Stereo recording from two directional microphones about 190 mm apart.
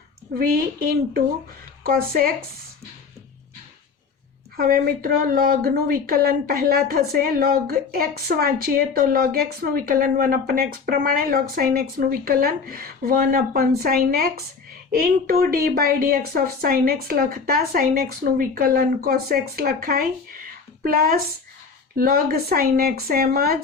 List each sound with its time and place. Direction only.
0.3 s a woman's voice: 50° right (ahead or behind)
4.5 s a woman's voice: 50° right (ahead or behind)